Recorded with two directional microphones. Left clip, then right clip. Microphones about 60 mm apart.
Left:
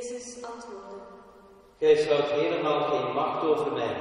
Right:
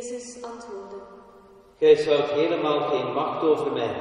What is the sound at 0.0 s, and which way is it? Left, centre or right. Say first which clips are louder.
Music: right 2 dB; right.